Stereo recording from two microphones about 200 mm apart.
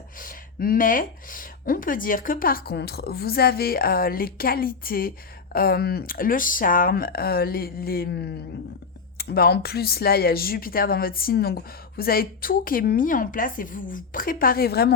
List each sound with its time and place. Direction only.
0.2 s speech: 45° left (ahead or behind)